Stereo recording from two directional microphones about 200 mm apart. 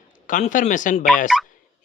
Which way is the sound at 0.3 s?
40° left (ahead or behind).